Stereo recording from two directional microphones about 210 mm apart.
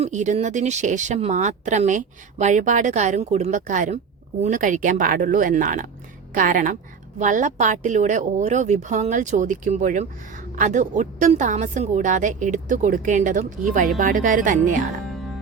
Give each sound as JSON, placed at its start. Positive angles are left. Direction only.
{"t": 0.0, "sound": "a woman's voice", "side_deg": -35}